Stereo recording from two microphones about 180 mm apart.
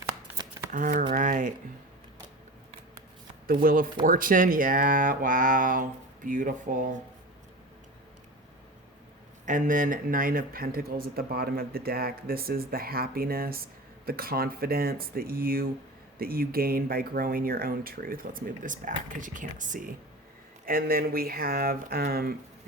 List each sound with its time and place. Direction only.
0.7 s speech: 50° right (ahead or behind)
3.4 s speech: 55° right (ahead or behind)
9.5 s speech: 45° right (ahead or behind)